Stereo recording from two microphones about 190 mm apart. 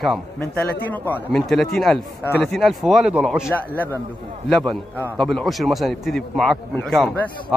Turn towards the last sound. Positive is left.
turn(degrees=5)  # may be behind; listen again after turning